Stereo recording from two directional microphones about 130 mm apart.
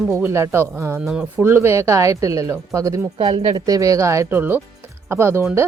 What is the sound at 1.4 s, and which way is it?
A woman's voice, 20° right (ahead or behind).